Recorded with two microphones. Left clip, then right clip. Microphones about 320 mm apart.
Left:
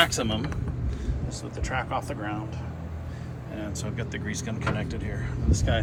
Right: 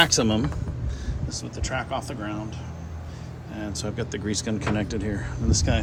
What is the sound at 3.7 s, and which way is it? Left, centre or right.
Speech, centre.